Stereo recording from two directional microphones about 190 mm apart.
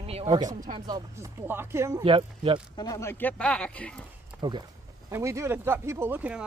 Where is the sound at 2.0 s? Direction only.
30° right (ahead or behind).